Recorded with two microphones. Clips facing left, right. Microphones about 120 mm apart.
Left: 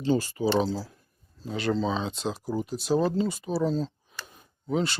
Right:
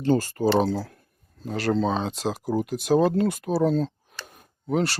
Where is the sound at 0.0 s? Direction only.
50° right (ahead or behind).